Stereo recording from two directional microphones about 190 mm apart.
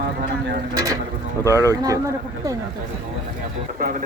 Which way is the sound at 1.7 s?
20° right (ahead or behind).